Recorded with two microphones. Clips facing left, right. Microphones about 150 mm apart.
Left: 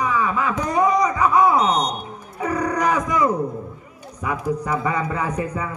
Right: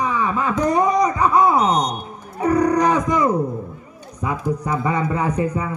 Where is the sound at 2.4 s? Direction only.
30° right (ahead or behind).